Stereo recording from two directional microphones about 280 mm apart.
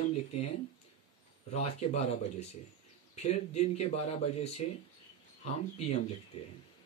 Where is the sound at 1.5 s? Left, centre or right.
Left.